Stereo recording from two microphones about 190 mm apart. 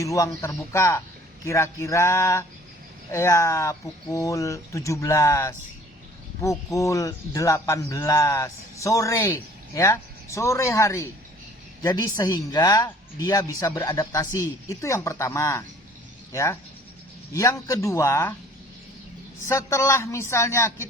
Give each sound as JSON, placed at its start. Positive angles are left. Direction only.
{"t": 0.0, "sound": "speech", "side_deg": 15}
{"t": 19.5, "sound": "speech", "side_deg": 15}